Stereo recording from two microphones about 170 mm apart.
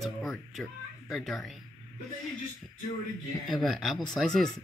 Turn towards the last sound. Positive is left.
turn(degrees=0)  # may be behind; listen again after turning